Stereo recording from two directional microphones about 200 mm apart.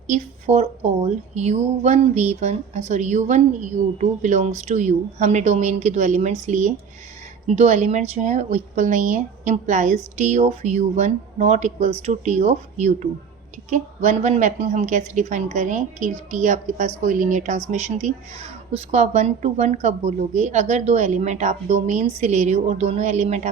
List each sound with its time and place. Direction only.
0.1 s a woman's voice: 35° right (ahead or behind)